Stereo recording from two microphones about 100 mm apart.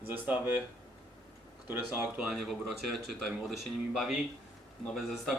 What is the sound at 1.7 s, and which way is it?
Speech, 10° right (ahead or behind).